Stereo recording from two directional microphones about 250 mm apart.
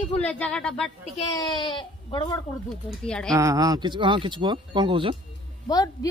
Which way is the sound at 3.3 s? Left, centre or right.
Centre.